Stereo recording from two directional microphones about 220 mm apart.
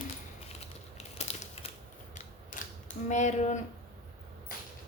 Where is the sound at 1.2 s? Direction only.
30° left (ahead or behind).